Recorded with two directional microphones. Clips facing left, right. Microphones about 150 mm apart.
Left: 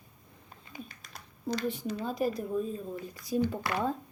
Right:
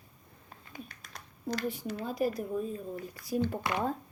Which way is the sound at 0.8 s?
5° left (ahead or behind).